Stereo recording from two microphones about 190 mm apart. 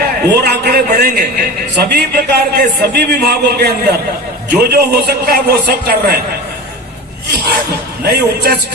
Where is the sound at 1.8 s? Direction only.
55° right (ahead or behind).